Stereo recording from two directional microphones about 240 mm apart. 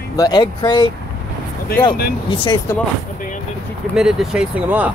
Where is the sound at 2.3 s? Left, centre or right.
Centre.